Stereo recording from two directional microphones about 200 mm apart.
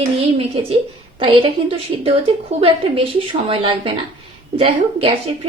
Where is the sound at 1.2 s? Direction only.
25° right (ahead or behind).